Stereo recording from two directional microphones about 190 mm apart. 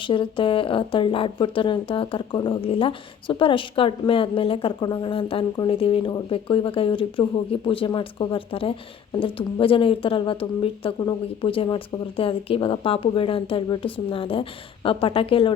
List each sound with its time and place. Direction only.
0.0 s a woman's voice: 25° left (ahead or behind)